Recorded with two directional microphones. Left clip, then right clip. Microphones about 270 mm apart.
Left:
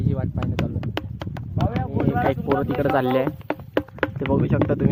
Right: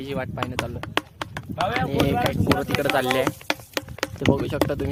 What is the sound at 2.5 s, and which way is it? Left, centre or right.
Speech, centre.